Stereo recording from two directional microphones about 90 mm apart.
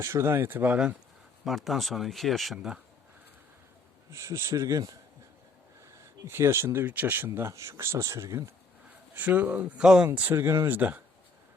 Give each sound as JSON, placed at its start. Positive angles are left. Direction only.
{"t": 0.0, "sound": "speech", "side_deg": -30}
{"t": 1.5, "sound": "speech", "side_deg": 0}
{"t": 4.1, "sound": "speech", "side_deg": -35}
{"t": 5.8, "sound": "speech", "side_deg": -30}
{"t": 7.3, "sound": "speech", "side_deg": -35}
{"t": 9.1, "sound": "speech", "side_deg": -20}
{"t": 10.2, "sound": "speech", "side_deg": -25}